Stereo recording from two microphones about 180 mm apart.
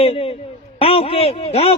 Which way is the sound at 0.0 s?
30° left (ahead or behind).